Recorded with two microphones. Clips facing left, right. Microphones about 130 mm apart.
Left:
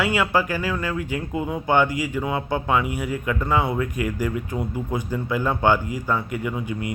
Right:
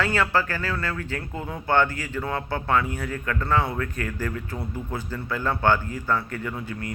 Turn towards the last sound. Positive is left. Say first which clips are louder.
# left 4 dB
turn(degrees=15)  # may be behind; listen again after turning